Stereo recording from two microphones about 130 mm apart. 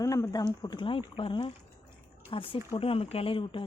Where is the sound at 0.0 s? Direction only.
25° left (ahead or behind).